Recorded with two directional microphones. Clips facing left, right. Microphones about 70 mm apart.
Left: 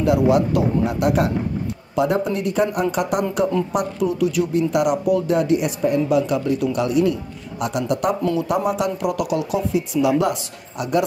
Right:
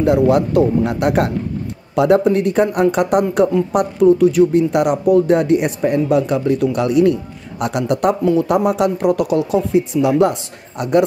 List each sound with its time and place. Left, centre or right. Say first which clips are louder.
0.0 s speech: right 3 dB; right
0.8 s speech: right 3 dB; right
9.0 s speech: right 6 dB; right